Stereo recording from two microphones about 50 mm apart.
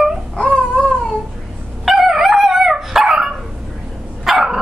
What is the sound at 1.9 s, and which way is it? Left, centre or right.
Dog, centre.